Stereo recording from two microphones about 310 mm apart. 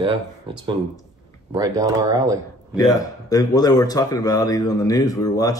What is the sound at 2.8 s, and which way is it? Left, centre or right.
Speech, centre.